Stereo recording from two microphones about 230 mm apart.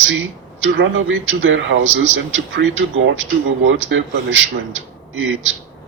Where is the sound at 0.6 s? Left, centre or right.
Right.